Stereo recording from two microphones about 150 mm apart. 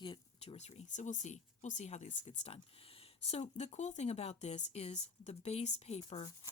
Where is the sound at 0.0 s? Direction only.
35° left (ahead or behind).